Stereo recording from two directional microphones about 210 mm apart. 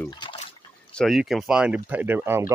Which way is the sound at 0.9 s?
Centre (ahead or behind).